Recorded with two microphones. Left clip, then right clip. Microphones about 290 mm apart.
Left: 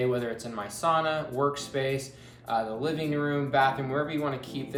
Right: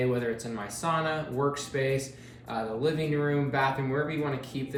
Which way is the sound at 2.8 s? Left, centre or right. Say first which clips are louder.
Right 1 dB; centre.